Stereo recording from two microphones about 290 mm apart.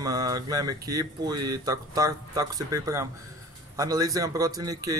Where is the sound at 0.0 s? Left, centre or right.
Centre.